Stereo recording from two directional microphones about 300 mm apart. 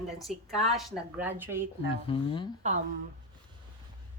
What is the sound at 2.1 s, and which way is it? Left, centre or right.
Speech, centre.